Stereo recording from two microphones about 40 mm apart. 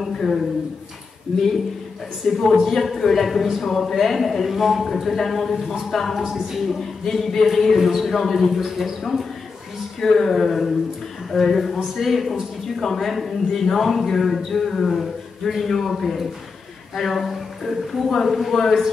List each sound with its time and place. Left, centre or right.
0.0 s a sound: centre
2.3 s a man's voice: centre
2.6 s a man's voice: centre